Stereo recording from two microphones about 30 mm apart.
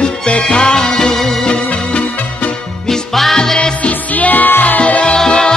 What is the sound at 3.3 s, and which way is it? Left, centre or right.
Music, left.